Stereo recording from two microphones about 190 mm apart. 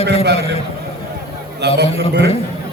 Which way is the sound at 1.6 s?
60° right (ahead or behind).